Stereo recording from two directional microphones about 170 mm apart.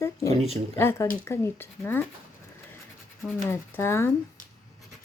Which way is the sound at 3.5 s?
15° left (ahead or behind).